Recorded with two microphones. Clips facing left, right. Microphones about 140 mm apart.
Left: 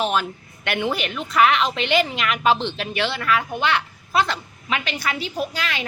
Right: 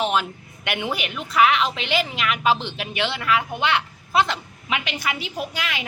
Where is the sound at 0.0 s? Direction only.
15° right (ahead or behind).